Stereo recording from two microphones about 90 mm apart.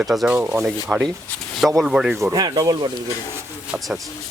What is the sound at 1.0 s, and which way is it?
Speech, 5° left (ahead or behind).